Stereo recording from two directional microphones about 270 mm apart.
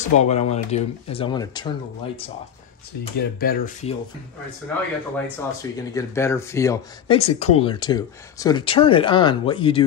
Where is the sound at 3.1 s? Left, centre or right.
Left.